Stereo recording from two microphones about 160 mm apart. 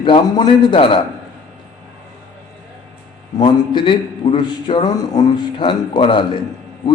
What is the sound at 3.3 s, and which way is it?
A man's voice, 30° left (ahead or behind).